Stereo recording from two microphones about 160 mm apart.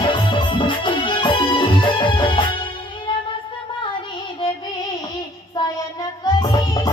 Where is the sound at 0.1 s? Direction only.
30° left (ahead or behind).